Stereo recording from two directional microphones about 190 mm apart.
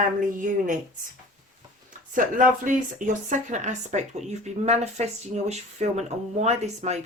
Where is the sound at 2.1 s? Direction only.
45° right (ahead or behind).